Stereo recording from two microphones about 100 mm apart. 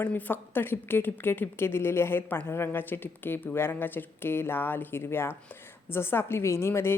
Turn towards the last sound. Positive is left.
turn(degrees=25)  # may be behind; listen again after turning